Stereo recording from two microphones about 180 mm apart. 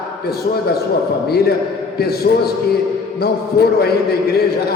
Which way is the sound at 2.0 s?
60° left (ahead or behind).